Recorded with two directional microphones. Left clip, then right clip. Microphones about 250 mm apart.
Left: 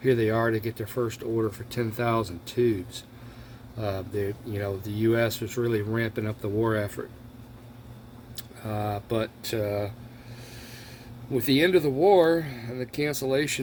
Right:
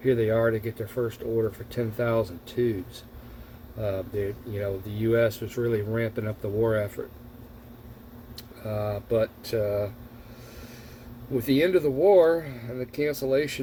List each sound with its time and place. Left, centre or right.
0.0 s speech: left
3.8 s speech: left
8.6 s speech: left
11.3 s speech: left